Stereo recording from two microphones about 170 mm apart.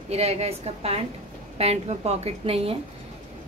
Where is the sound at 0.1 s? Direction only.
40° right (ahead or behind).